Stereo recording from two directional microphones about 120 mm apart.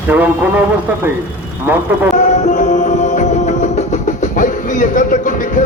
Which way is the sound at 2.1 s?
90° left.